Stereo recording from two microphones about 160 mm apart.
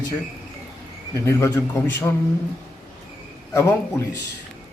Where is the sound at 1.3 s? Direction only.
15° left (ahead or behind).